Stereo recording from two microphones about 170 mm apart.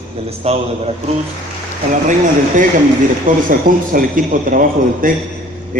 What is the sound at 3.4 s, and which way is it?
A man's voice, 55° right (ahead or behind).